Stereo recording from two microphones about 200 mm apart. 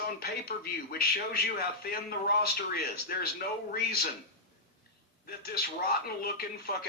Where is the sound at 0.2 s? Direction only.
50° left (ahead or behind).